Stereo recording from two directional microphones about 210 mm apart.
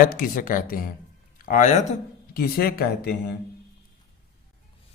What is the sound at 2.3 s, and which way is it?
Speech, 45° left (ahead or behind).